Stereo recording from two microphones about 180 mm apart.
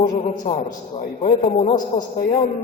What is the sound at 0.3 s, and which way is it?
A man's voice, 45° left (ahead or behind).